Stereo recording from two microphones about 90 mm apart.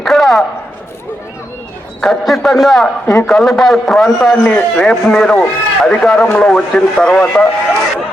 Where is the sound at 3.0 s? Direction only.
30° left (ahead or behind).